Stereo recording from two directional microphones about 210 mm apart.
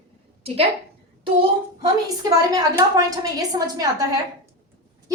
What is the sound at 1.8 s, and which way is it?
A woman's voice, 15° right (ahead or behind).